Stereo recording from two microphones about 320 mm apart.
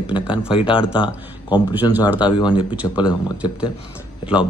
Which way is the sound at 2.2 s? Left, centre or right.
Centre.